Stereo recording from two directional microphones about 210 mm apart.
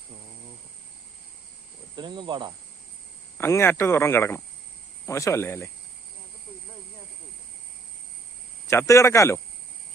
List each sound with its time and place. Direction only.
2.0 s speech: 20° right (ahead or behind)
3.3 s speech: 10° left (ahead or behind)
8.6 s speech: 15° left (ahead or behind)